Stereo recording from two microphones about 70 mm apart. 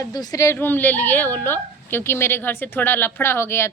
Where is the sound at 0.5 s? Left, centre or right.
Left.